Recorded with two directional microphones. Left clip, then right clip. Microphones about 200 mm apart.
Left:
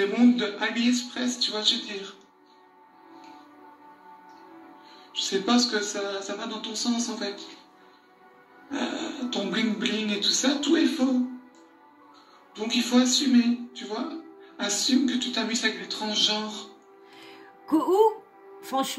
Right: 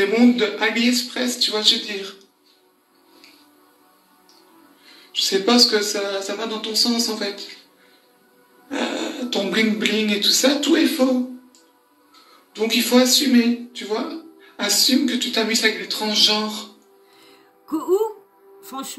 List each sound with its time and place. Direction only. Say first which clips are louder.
0.0 s speech: right 6 dB; 40° right (ahead or behind)
4.8 s speech: right 8 dB; 40° right (ahead or behind)
8.6 s speech: right 6 dB; 40° right (ahead or behind)
12.5 s speech: right 7 dB; 40° right (ahead or behind)
17.2 s music: left 6 dB; centre (ahead or behind)
18.6 s speech: left 5 dB; centre (ahead or behind)